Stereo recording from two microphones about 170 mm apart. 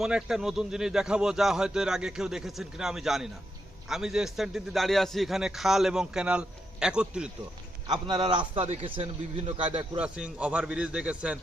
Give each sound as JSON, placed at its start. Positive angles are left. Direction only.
{"t": 0.0, "sound": "a man's voice", "side_deg": -5}
{"t": 7.9, "sound": "a man's voice", "side_deg": -25}
{"t": 10.0, "sound": "a man's voice", "side_deg": -5}